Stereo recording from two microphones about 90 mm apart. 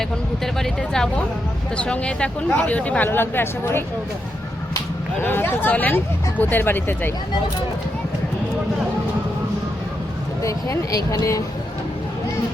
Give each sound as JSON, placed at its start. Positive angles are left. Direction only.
{"t": 0.0, "sound": "speech", "side_deg": 5}
{"t": 5.2, "sound": "speech", "side_deg": 20}
{"t": 10.4, "sound": "speech", "side_deg": 40}